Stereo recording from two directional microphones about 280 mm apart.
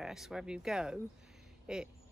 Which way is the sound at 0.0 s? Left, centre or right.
Centre.